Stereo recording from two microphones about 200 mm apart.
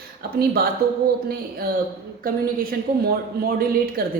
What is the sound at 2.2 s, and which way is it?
Speech, 45° right (ahead or behind).